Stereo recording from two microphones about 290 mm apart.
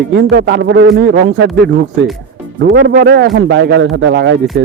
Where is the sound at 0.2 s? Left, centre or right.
Right.